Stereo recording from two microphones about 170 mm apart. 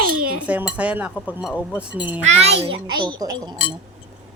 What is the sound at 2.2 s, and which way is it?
A child's voice, 40° right (ahead or behind).